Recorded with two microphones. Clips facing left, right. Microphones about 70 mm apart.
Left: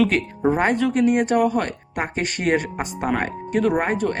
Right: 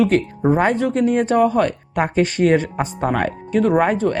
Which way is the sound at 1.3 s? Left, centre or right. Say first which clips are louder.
Right 3 dB; right.